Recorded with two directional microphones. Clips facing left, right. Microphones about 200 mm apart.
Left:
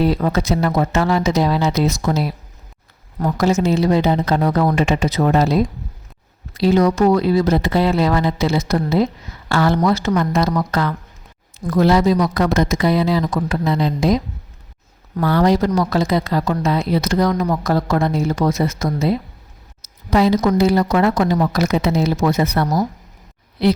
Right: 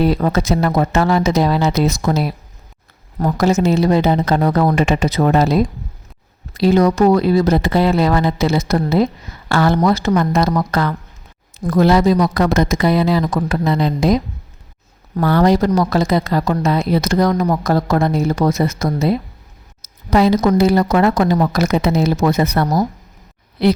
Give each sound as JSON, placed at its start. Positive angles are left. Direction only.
{"t": 0.0, "sound": "a woman's voice", "side_deg": -45}
{"t": 3.2, "sound": "a woman's voice", "side_deg": -45}